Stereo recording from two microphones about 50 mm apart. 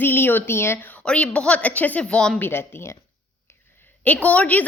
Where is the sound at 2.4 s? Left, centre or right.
Left.